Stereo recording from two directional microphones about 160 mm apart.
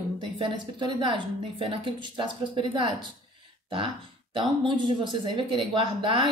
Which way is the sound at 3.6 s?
30° right (ahead or behind).